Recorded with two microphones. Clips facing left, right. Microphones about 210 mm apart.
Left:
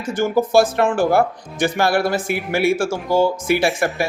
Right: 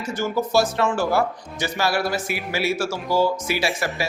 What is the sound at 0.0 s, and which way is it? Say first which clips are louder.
Speech: left 5 dB; 50° left (ahead or behind).